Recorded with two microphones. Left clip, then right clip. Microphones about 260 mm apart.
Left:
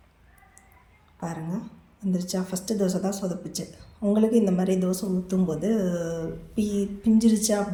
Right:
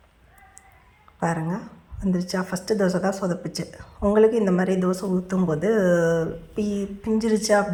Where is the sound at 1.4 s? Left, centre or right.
Right.